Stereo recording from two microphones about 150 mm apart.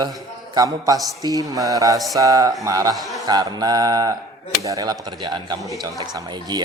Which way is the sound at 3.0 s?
Centre (ahead or behind).